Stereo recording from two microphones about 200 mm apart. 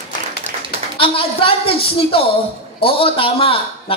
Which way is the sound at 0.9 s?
25° left (ahead or behind).